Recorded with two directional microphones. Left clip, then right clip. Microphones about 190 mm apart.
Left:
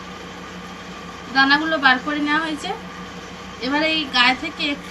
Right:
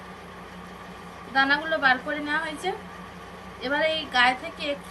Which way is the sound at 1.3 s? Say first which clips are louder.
Left 6 dB; 45° right (ahead or behind).